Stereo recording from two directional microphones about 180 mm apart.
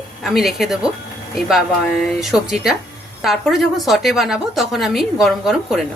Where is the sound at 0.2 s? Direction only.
Centre (ahead or behind).